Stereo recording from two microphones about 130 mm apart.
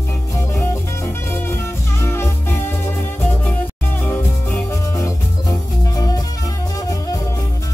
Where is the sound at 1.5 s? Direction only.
20° left (ahead or behind).